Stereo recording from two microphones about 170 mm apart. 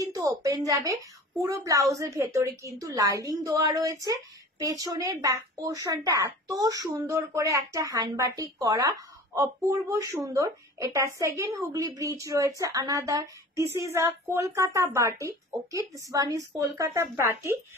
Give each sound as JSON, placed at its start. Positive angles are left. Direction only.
{"t": 0.0, "sound": "a woman's voice", "side_deg": -20}